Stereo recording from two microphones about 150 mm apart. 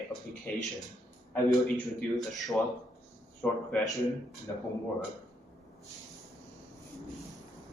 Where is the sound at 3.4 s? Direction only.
10° left (ahead or behind).